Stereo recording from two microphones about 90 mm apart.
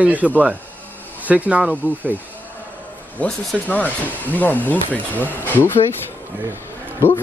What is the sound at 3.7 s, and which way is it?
Speech, 20° left (ahead or behind).